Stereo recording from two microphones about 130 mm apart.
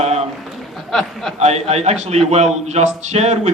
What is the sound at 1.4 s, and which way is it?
A man's voice, 55° right (ahead or behind).